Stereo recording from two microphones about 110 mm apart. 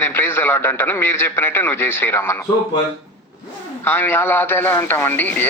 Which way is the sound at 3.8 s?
20° left (ahead or behind).